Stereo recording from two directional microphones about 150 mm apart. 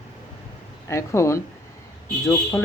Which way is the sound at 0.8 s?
20° left (ahead or behind).